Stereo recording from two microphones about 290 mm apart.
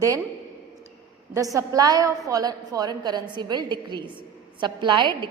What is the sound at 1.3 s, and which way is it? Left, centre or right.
A woman's voice, centre.